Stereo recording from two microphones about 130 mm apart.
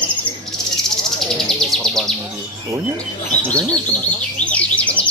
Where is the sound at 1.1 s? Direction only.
5° left (ahead or behind).